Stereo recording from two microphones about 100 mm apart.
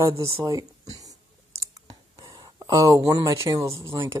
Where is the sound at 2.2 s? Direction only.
35° right (ahead or behind).